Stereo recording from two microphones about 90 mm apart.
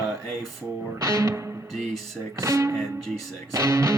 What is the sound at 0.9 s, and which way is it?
Music, 35° right (ahead or behind).